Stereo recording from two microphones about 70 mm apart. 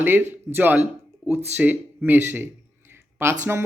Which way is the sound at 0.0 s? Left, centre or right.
Right.